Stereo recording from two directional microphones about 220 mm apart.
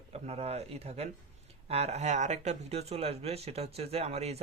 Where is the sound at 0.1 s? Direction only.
30° right (ahead or behind).